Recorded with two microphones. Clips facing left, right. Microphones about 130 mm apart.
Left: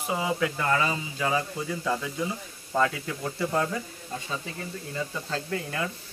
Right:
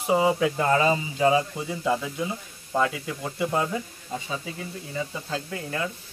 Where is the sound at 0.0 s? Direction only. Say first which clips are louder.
Right 6 dB; 25° right (ahead or behind).